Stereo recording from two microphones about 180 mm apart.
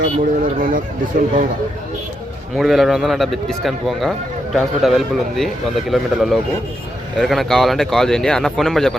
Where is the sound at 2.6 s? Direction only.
Centre (ahead or behind).